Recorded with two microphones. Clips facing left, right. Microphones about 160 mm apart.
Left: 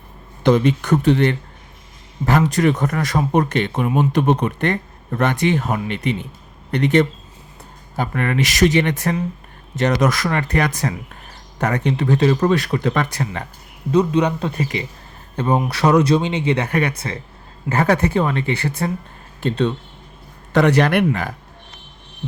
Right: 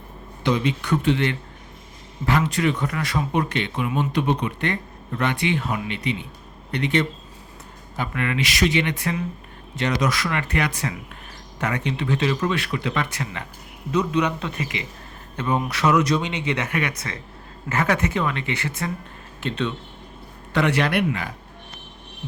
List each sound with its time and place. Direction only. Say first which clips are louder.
0.4 s speech: left 7 dB; 50° left (ahead or behind)